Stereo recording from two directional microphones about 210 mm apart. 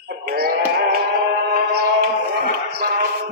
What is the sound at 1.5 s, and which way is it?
Music, 45° right (ahead or behind).